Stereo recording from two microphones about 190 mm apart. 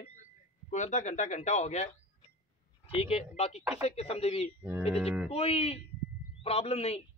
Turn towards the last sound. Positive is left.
turn(degrees=35)  # may be behind; listen again after turning